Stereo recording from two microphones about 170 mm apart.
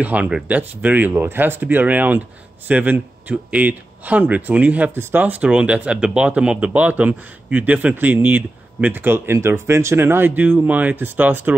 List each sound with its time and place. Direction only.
0.0 s speech: 10° right (ahead or behind)